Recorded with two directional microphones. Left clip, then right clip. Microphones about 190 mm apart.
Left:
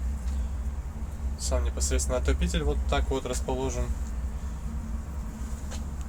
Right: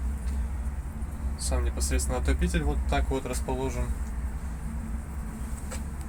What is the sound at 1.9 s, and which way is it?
Speech, centre (ahead or behind).